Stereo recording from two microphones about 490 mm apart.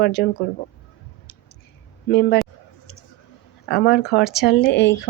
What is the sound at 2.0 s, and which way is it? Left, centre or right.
Speech, centre.